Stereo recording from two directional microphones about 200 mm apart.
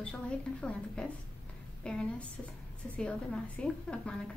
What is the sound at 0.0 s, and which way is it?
A woman's voice, 5° left (ahead or behind).